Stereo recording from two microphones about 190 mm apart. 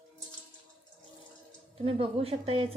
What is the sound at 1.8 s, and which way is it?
Speech, 30° right (ahead or behind).